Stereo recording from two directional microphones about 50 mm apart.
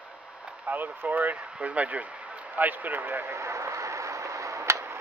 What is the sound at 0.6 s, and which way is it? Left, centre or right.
Speech, right.